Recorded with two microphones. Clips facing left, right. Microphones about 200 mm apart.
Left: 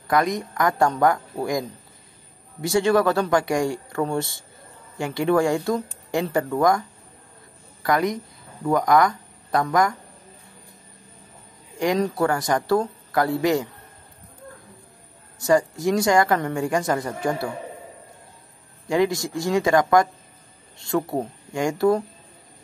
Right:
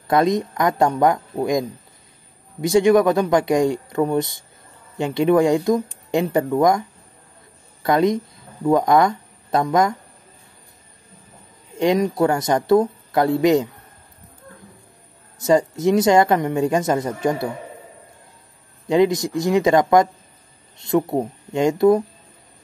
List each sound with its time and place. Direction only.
0.1 s speech: 20° right (ahead or behind)
7.8 s a woman's voice: 25° right (ahead or behind)
12.0 s speech: 20° right (ahead or behind)
15.3 s speech: 20° right (ahead or behind)
18.9 s speech: 20° right (ahead or behind)